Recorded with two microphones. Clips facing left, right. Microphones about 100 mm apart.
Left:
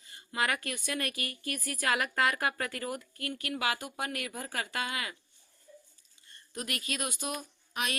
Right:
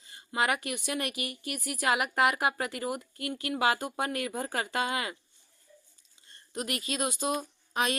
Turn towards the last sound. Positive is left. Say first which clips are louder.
# right 6 dB
turn(degrees=-25)  # may be behind; listen again after turning